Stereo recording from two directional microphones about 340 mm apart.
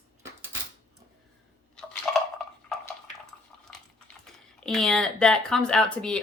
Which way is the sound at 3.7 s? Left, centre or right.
Centre.